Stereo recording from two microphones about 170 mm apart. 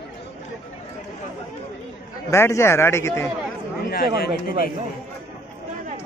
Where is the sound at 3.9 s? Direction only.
60° left (ahead or behind).